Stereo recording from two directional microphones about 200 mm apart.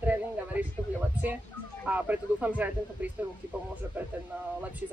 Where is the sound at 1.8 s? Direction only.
10° right (ahead or behind).